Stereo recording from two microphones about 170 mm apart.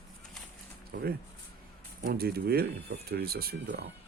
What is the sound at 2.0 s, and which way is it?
Speech, 65° right (ahead or behind).